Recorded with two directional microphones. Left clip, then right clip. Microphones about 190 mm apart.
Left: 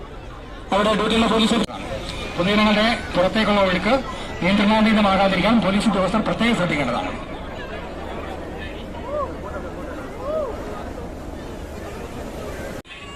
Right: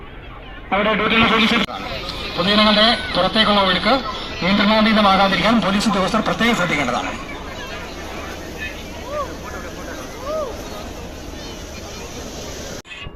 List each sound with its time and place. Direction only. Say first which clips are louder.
0.7 s a man's voice: right 2 dB; 5° left (ahead or behind)
2.4 s a man's voice: right 4 dB; 30° right (ahead or behind)